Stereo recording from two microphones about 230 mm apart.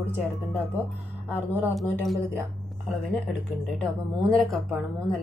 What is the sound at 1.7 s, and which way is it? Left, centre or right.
Speech, centre.